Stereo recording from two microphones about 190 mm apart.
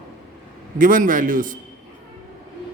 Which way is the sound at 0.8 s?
45° right (ahead or behind).